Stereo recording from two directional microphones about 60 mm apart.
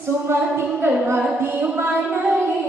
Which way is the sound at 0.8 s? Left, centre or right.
Right.